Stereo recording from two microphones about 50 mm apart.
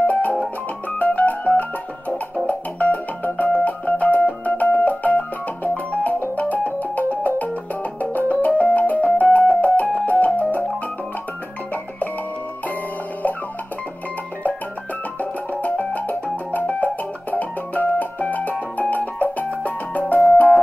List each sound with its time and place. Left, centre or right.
0.0 s music: left
15.8 s music: left